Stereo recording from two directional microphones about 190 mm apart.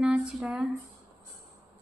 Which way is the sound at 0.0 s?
5° right (ahead or behind).